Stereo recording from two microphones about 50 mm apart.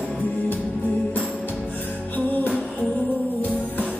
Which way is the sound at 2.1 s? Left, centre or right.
Left.